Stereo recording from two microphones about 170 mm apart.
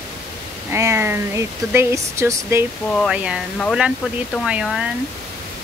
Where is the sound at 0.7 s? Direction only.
15° right (ahead or behind).